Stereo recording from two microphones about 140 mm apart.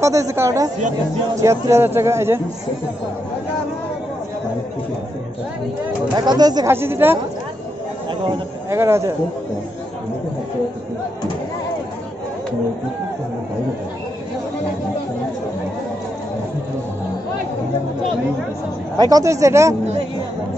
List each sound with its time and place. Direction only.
0.0 s speech: 20° right (ahead or behind)
6.1 s speech: 30° right (ahead or behind)
6.7 s speech: 15° right (ahead or behind)
8.6 s speech: 20° right (ahead or behind)
18.9 s speech: 25° right (ahead or behind)